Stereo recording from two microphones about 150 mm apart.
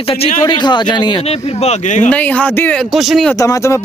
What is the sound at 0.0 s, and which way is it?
A man's voice, 40° left (ahead or behind).